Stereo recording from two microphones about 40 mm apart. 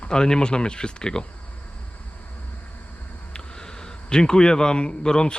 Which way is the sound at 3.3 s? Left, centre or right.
Centre.